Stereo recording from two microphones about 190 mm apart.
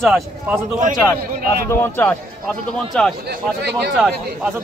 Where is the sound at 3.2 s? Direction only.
55° right (ahead or behind).